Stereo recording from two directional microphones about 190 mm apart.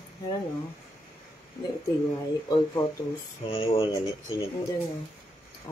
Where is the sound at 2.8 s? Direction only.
20° left (ahead or behind).